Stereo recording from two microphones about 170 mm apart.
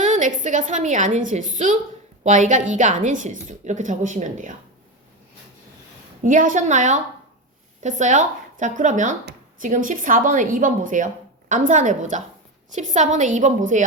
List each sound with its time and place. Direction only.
0.0 s a woman's voice: 45° right (ahead or behind)
6.2 s a woman's voice: 50° right (ahead or behind)